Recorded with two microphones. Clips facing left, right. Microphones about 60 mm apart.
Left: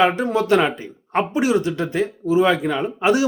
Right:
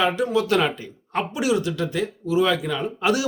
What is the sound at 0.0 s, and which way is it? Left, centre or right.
Speech, left.